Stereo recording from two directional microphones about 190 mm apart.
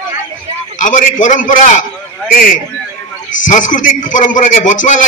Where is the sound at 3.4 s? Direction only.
45° left (ahead or behind).